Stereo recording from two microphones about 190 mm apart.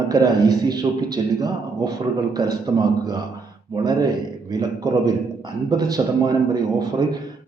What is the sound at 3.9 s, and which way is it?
A man's voice, 20° right (ahead or behind).